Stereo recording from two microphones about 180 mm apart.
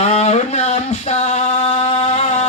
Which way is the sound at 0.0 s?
40° left (ahead or behind).